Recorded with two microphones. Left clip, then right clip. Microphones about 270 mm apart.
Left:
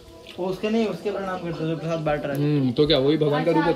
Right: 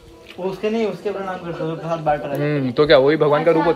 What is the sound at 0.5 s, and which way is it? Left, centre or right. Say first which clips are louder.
Speech: right 4 dB; centre.